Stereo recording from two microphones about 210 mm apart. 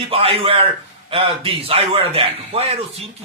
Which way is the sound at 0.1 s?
25° right (ahead or behind).